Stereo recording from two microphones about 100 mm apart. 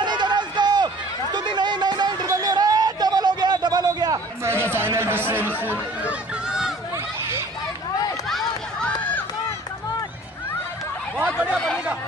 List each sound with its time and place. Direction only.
0.0 s run: 50° right (ahead or behind)
4.5 s a sound: 25° right (ahead or behind)
5.6 s chatter: 20° right (ahead or behind)
8.3 s run: centre (ahead or behind)
8.8 s run: 15° left (ahead or behind)
11.5 s a sound: 10° left (ahead or behind)